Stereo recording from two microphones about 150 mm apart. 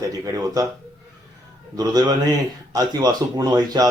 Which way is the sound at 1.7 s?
25° right (ahead or behind).